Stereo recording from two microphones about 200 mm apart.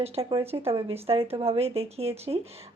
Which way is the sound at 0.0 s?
30° right (ahead or behind).